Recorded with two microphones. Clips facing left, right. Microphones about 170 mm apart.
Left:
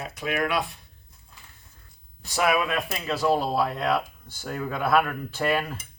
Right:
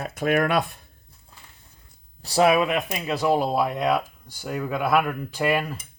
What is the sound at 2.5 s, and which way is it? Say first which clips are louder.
Speech: right 4 dB; 20° right (ahead or behind).